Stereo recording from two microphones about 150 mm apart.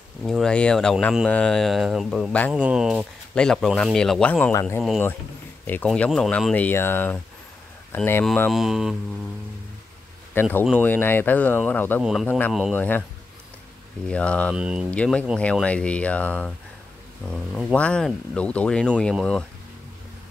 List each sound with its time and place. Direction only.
0.2 s speech: centre (ahead or behind)
2.5 s speech: 5° right (ahead or behind); by 4.8 s 15° left (ahead or behind)
5.9 s speech: 5° left (ahead or behind)
8.5 s speech: centre (ahead or behind)
10.4 s speech: 15° left (ahead or behind)
12.0 s speech: centre (ahead or behind)
12.3 s speech: 10° left (ahead or behind)
14.0 s speech: 10° left (ahead or behind)
14.5 s speech: 5° right (ahead or behind)
14.9 s speech: 5° left (ahead or behind)
17.3 s speech: 5° right (ahead or behind)
17.7 s speech: 5° left (ahead or behind)